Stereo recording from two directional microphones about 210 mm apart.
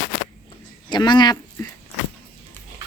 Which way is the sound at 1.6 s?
15° left (ahead or behind).